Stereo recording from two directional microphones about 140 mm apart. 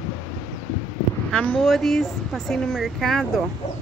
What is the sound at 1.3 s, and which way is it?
Speech, 5° left (ahead or behind).